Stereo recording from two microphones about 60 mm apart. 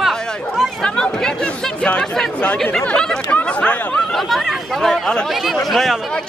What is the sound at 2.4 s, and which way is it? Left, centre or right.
Speech, centre.